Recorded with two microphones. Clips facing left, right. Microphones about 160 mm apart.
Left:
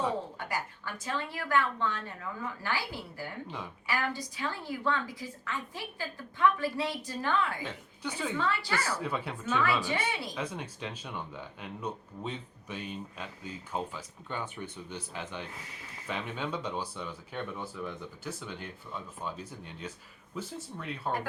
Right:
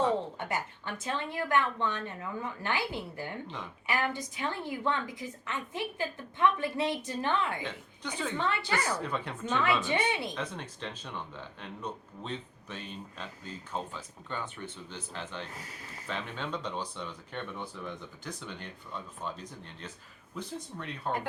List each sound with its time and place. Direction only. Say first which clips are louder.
0.3 s a woman's voice: right 1 dB; 25° right (ahead or behind)
3.4 s speech: left 1 dB; 10° left (ahead or behind)
3.8 s a woman's voice: right 2 dB; 20° right (ahead or behind)
7.6 s speech: left 1 dB; 10° left (ahead or behind)
8.4 s a woman's voice: right 1 dB; 20° right (ahead or behind)
9.0 s speech: even; 5° left (ahead or behind)
9.6 s a woman's voice: right 2 dB; 20° right (ahead or behind)
10.3 s speech: left 1 dB; 10° left (ahead or behind)